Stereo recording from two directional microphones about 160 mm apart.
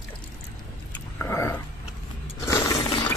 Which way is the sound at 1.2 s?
15° left (ahead or behind).